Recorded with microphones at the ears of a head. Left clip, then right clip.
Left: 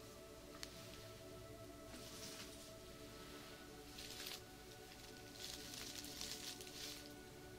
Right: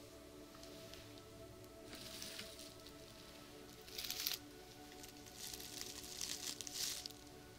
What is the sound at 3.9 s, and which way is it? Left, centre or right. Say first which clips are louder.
Music: right 8 dB; right.